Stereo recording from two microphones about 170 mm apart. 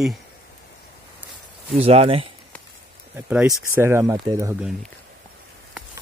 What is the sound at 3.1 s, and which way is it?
Speech, 10° right (ahead or behind).